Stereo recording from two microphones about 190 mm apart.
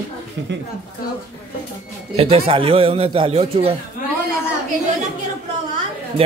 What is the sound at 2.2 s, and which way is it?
A man's voice, 30° right (ahead or behind).